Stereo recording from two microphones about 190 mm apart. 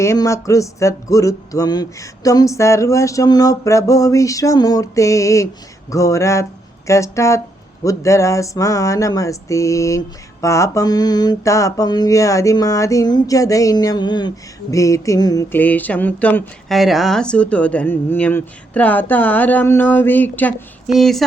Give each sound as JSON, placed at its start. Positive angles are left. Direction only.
{"t": 0.0, "sound": "mantra", "side_deg": 15}
{"t": 20.8, "sound": "speech", "side_deg": 0}